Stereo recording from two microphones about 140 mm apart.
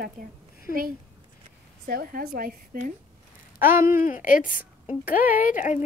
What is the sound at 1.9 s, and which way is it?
A woman's voice, 90° right.